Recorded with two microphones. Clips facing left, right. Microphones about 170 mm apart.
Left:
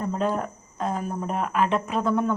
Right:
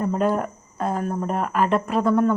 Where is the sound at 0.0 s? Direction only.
5° right (ahead or behind).